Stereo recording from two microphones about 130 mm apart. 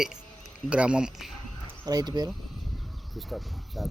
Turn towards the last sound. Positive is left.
turn(degrees=0)  # may be behind; listen again after turning